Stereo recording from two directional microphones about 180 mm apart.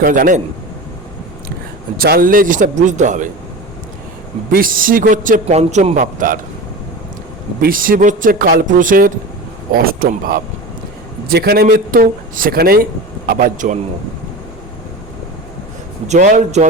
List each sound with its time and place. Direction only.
0.0 s a man's voice: 50° right (ahead or behind)
2.0 s a man's voice: 55° right (ahead or behind)
4.5 s a man's voice: 50° right (ahead or behind)
7.6 s a man's voice: 50° right (ahead or behind)
16.0 s a man's voice: 45° right (ahead or behind)